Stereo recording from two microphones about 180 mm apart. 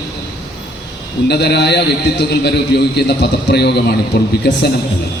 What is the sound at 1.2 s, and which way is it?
A man's voice, 65° left (ahead or behind).